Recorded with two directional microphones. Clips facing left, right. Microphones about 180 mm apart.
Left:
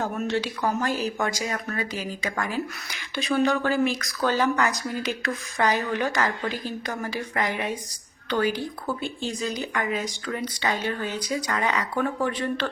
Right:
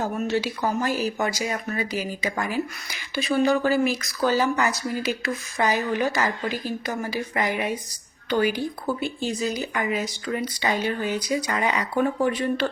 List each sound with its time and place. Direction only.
0.0 s speech: 5° right (ahead or behind)